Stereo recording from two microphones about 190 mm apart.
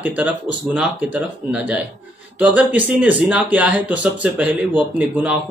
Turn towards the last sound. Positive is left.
turn(degrees=-5)  # may be behind; listen again after turning